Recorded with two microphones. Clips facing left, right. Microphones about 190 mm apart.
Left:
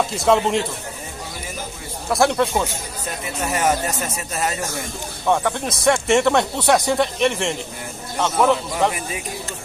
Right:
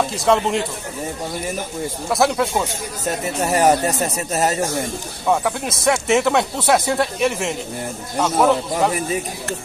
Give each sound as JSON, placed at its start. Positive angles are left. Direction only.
{"t": 0.0, "sound": "speech", "side_deg": 0}
{"t": 2.0, "sound": "speech", "side_deg": 0}
{"t": 3.1, "sound": "speech", "side_deg": -35}
{"t": 5.2, "sound": "speech", "side_deg": -5}